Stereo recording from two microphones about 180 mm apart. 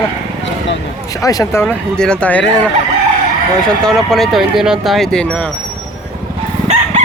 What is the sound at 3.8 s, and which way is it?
Speech, centre (ahead or behind).